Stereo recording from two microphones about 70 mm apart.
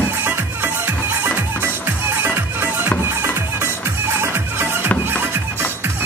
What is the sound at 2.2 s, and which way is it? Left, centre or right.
Music, right.